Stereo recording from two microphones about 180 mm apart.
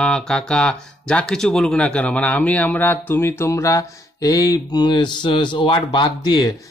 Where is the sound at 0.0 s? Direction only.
5° left (ahead or behind).